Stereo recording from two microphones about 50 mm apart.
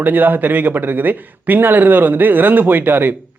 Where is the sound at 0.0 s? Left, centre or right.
Right.